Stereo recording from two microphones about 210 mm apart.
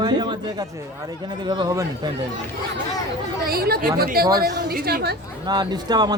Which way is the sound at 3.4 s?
45° right (ahead or behind).